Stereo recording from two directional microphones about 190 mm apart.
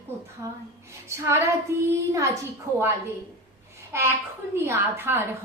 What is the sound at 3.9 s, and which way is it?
A woman's voice, 15° right (ahead or behind).